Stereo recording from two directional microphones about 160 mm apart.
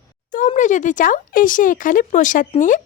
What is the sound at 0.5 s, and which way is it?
A woman's voice, 50° left (ahead or behind).